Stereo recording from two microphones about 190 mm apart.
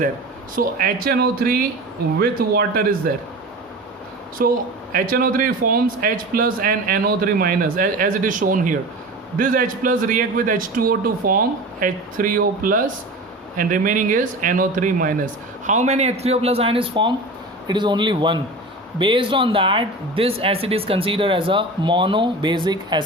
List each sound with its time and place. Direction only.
0.5 s speech: 50° right (ahead or behind)
4.4 s speech: 50° right (ahead or behind); by 23.0 s 25° right (ahead or behind)